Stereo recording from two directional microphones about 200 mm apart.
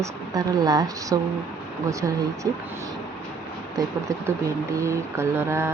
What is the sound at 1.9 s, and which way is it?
Mantra, 15° right (ahead or behind).